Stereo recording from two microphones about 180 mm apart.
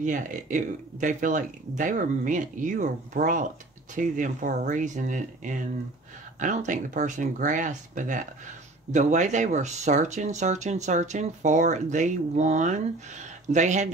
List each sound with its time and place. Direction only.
0.0 s speech: 45° right (ahead or behind)